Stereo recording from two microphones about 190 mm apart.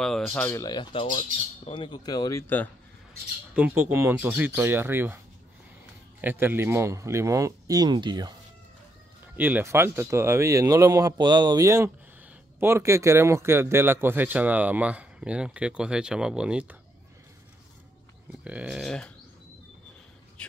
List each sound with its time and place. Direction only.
0.0 s speech: 5° left (ahead or behind); by 1.0 s 25° left (ahead or behind)
1.0 s speech: 45° left (ahead or behind)
1.7 s speech: 25° left (ahead or behind); by 2.7 s 10° left (ahead or behind)
3.5 s speech: 10° right (ahead or behind)
6.2 s speech: 10° right (ahead or behind)
9.4 s speech: 10° right (ahead or behind)
18.4 s speech: 5° right (ahead or behind)
20.4 s whispering: 5° left (ahead or behind)